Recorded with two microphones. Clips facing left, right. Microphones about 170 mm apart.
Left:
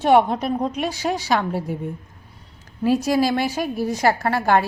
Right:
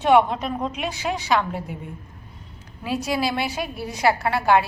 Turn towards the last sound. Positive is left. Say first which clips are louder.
# left 1 dB
turn(degrees=45)  # may be behind; listen again after turning